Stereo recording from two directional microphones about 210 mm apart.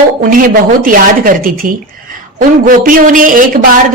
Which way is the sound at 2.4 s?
40° right (ahead or behind).